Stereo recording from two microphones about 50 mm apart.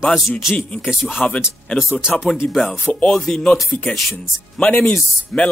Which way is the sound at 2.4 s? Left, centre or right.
Left.